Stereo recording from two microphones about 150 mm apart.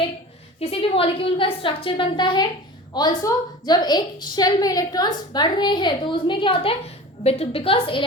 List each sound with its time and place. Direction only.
0.6 s a woman's voice: 40° left (ahead or behind)